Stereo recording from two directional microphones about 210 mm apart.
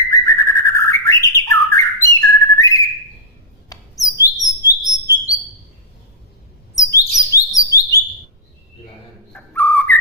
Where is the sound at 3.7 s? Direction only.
15° left (ahead or behind).